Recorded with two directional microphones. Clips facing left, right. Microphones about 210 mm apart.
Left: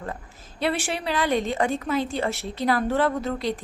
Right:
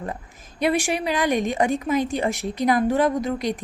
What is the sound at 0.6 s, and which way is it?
A woman's voice, 15° right (ahead or behind).